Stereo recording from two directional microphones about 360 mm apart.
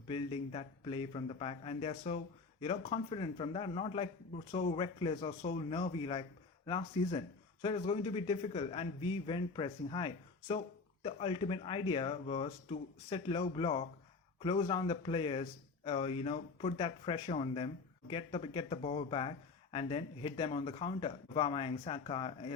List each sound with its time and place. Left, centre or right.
0.1 s speech: centre